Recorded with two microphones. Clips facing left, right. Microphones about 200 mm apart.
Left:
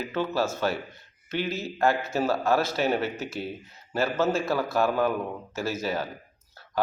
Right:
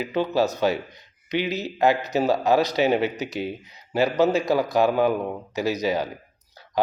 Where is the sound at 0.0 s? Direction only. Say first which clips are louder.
Right 5 dB; 15° right (ahead or behind).